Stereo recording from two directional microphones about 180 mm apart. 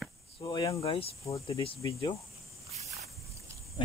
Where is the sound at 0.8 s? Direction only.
35° left (ahead or behind).